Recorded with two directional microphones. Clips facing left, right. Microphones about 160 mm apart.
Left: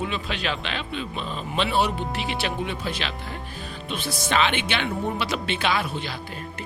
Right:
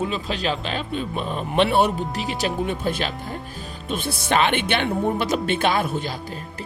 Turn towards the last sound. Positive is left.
turn(degrees=-45)  # may be behind; listen again after turning